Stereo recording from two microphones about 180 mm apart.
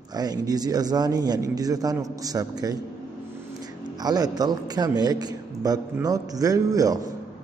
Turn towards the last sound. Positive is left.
turn(degrees=-20)  # may be behind; listen again after turning